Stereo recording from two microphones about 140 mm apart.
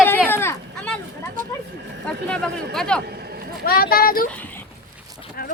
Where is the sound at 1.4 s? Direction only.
75° right (ahead or behind).